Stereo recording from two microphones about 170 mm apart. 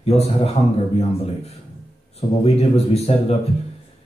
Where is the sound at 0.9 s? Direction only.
35° left (ahead or behind).